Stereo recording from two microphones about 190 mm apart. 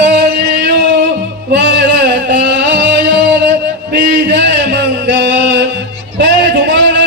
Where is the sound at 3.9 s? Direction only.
65° right (ahead or behind).